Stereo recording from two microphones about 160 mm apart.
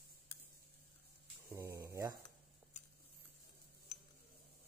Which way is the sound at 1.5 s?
20° right (ahead or behind).